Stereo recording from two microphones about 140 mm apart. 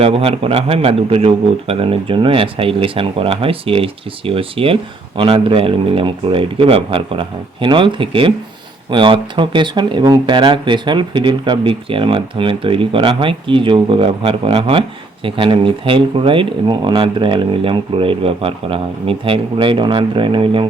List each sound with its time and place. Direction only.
0.0 s speech: 45° right (ahead or behind)